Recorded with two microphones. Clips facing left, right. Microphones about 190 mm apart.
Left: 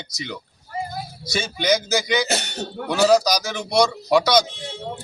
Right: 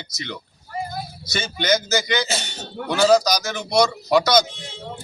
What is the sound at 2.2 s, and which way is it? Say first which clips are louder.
Speech: left 3 dB; 65° left (ahead or behind).